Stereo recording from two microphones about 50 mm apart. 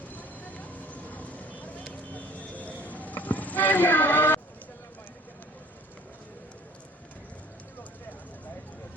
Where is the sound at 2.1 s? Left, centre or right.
Left.